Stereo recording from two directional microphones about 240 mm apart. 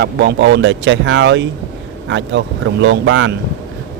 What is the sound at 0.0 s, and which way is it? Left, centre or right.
Speech, right.